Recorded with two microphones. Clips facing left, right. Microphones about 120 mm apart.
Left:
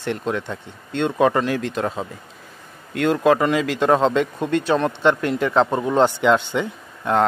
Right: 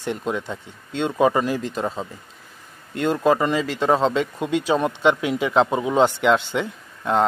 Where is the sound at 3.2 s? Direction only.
Centre (ahead or behind).